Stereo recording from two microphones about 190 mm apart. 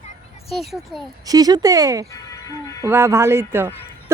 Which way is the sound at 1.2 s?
20° right (ahead or behind).